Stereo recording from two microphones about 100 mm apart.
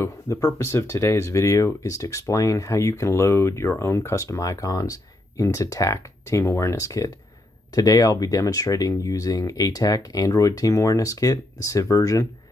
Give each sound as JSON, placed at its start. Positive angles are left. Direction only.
{"t": 0.0, "sound": "speech", "side_deg": 30}